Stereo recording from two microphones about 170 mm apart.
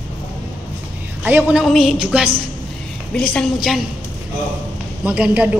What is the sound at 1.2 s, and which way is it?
A woman's voice, 5° right (ahead or behind).